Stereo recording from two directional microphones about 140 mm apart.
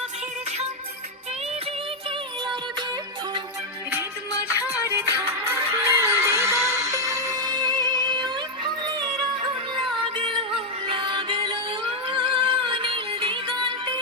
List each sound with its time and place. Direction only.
2.0 s music: 35° right (ahead or behind)
4.9 s music: 20° right (ahead or behind); by 13.4 s 40° right (ahead or behind)